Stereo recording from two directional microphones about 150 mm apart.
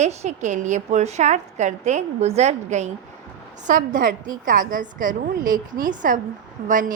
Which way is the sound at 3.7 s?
60° right (ahead or behind).